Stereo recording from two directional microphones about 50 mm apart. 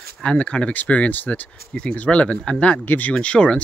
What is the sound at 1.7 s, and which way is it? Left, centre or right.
Speech, centre.